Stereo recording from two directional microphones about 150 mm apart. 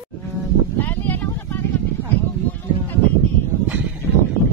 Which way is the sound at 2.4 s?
10° left (ahead or behind).